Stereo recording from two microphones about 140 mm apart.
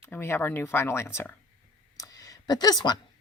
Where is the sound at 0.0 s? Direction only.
15° left (ahead or behind).